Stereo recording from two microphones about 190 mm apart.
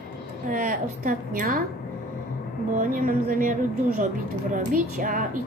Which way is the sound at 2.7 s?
45° right (ahead or behind).